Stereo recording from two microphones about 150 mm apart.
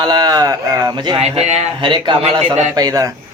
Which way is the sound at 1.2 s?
45° right (ahead or behind).